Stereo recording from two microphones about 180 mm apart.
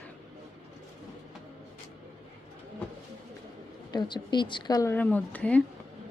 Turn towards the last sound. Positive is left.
turn(degrees=10)  # may be behind; listen again after turning